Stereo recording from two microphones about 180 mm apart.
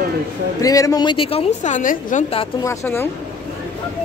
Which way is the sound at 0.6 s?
20° left (ahead or behind).